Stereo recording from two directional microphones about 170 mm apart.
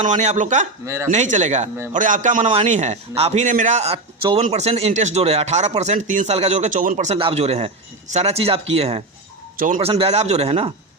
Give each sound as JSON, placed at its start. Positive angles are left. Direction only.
{"t": 0.0, "sound": "speech", "side_deg": -45}
{"t": 2.4, "sound": "speech", "side_deg": -35}
{"t": 9.6, "sound": "speech", "side_deg": -50}
{"t": 9.8, "sound": "speech", "side_deg": -35}